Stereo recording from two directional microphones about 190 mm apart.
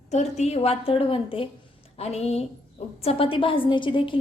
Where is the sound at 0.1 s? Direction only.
35° left (ahead or behind).